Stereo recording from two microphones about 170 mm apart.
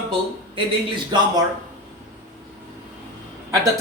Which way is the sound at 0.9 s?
25° right (ahead or behind).